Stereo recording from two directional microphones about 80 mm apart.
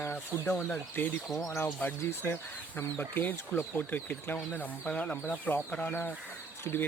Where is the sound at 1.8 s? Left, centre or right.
Left.